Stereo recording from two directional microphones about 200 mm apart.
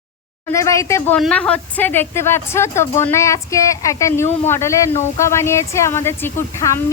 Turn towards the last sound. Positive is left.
turn(degrees=15)  # may be behind; listen again after turning